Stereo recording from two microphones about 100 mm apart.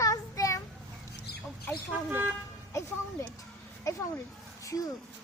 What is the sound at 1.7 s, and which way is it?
Speech, 20° right (ahead or behind).